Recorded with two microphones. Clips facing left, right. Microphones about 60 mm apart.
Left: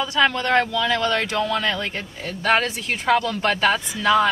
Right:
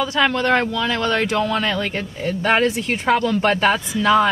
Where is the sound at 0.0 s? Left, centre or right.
Centre.